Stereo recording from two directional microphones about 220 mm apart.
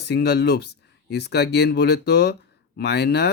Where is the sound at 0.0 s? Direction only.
50° left (ahead or behind).